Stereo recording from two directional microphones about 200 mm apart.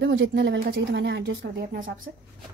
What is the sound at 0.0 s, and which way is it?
Speech, 65° right (ahead or behind).